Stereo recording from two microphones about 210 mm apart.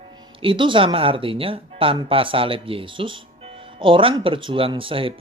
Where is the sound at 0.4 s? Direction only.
25° right (ahead or behind).